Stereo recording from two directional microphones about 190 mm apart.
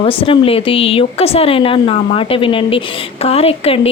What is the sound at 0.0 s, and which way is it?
Speech, 30° left (ahead or behind).